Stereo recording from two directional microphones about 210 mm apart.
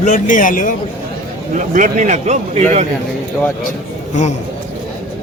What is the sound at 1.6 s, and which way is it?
A man's voice, 40° right (ahead or behind).